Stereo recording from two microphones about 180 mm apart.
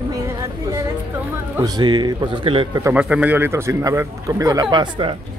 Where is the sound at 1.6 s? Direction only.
25° right (ahead or behind).